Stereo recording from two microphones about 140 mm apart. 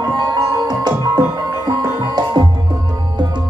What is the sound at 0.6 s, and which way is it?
Music, 30° right (ahead or behind).